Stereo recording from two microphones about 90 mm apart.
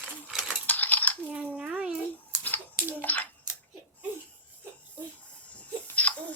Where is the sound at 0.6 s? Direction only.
20° left (ahead or behind).